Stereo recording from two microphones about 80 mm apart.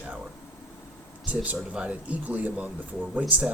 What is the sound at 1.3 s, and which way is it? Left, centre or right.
Speech, centre.